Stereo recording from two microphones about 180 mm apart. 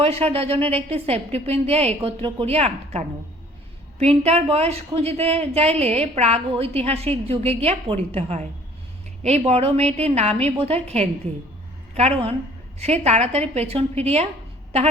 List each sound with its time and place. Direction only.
0.0 s speech: 35° right (ahead or behind)
4.0 s speech: 35° right (ahead or behind)
9.5 s speech: 35° right (ahead or behind)